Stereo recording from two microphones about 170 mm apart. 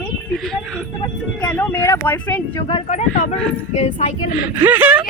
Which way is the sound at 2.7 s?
40° left (ahead or behind).